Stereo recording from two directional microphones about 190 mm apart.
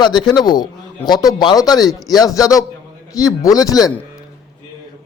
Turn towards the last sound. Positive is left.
turn(degrees=20)  # may be behind; listen again after turning